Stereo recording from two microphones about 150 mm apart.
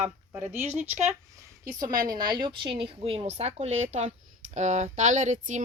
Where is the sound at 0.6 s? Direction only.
10° right (ahead or behind).